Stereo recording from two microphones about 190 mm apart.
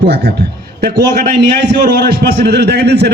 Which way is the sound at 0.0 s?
60° right (ahead or behind).